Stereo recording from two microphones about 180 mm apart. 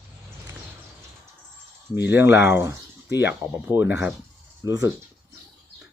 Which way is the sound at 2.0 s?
10° right (ahead or behind).